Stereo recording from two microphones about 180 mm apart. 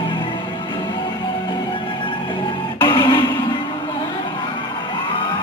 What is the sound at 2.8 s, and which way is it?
Music, 25° left (ahead or behind).